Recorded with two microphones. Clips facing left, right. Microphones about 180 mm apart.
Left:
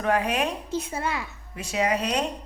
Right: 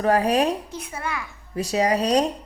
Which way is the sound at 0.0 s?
35° right (ahead or behind).